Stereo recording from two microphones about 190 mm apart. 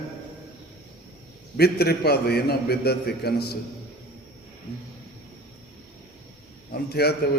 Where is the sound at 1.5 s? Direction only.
55° left (ahead or behind).